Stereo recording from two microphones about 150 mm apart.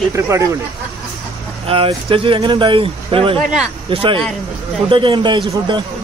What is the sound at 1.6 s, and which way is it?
Speech, 35° right (ahead or behind).